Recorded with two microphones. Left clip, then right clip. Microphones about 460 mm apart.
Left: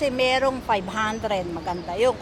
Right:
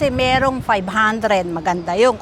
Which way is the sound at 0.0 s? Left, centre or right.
Right.